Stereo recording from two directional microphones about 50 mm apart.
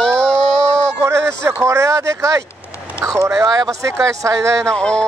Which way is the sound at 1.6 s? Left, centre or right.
Right.